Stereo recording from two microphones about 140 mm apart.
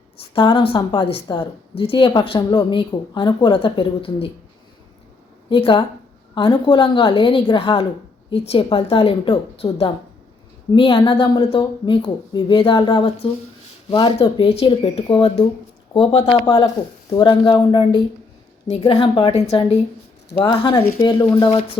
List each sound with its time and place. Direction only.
0.2 s a woman's voice: 35° left (ahead or behind)
5.5 s a woman's voice: 40° left (ahead or behind)
15.9 s a woman's voice: 35° left (ahead or behind)